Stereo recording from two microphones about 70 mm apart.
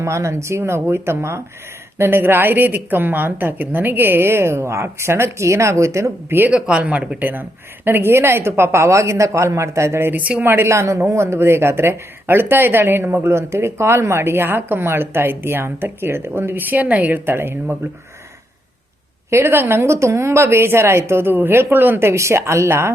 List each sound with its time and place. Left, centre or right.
0.0 s speech: right
6.5 s speech: centre
7.2 s speech: right
10.1 s speech: right
10.5 s speech: right
19.3 s speech: right